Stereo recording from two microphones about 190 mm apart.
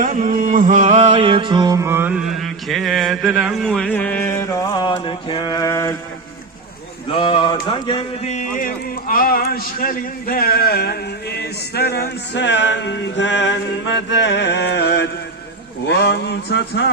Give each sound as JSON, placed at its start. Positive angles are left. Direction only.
{"t": 0.0, "sound": "mantra", "side_deg": -45}
{"t": 7.1, "sound": "a man's voice", "side_deg": 30}